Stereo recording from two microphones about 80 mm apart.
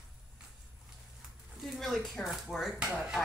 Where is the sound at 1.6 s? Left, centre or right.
Centre.